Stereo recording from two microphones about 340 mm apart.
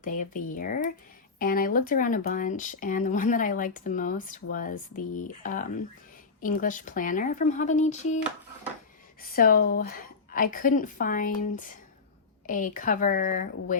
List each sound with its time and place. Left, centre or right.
0.0 s speech: left
9.2 s speech: left